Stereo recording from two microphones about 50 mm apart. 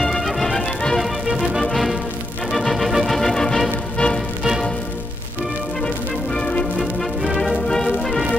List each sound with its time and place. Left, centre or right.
0.0 s music: centre
3.2 s music: centre
4.0 s music: left
4.4 s music: centre
6.3 s music: centre
6.8 s music: centre
7.6 s music: centre